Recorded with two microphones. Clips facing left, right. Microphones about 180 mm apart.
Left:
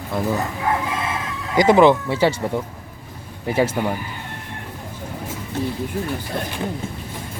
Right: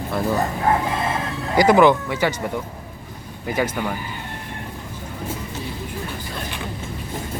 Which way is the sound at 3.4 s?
30° left (ahead or behind).